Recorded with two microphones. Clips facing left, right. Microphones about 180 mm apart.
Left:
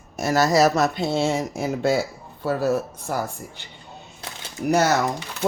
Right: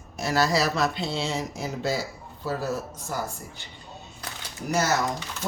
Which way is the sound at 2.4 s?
65° left (ahead or behind).